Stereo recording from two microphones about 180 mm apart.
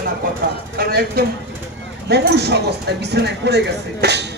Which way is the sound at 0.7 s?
55° right (ahead or behind).